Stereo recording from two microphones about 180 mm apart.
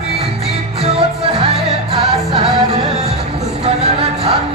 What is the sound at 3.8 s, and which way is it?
Music, 35° right (ahead or behind).